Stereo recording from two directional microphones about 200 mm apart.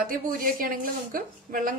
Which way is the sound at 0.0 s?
45° right (ahead or behind).